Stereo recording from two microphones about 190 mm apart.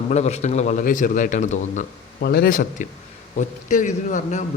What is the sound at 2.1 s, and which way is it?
A man's voice, 60° left (ahead or behind).